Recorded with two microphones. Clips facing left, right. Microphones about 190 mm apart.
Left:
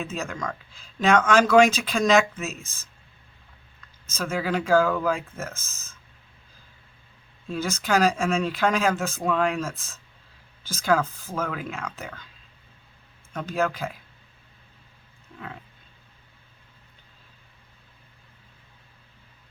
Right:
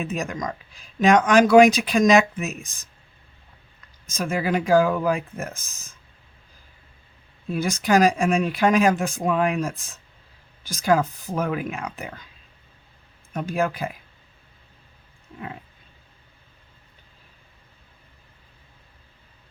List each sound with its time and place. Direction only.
0.0 s speech: 15° right (ahead or behind)
4.0 s speech: 15° right (ahead or behind)
7.5 s speech: 15° right (ahead or behind)
13.3 s speech: 15° right (ahead or behind)